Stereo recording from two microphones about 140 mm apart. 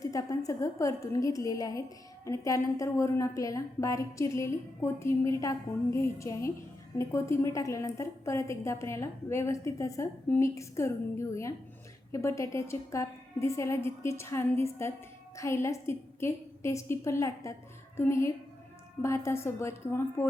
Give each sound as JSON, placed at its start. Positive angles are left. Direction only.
{"t": 0.0, "sound": "a woman's voice", "side_deg": 25}